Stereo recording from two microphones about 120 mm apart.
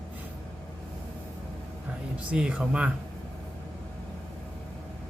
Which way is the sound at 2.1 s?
10° right (ahead or behind).